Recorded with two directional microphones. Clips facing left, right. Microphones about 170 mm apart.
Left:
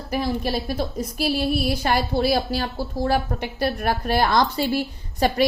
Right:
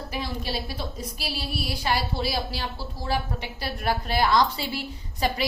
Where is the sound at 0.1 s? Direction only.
50° left (ahead or behind).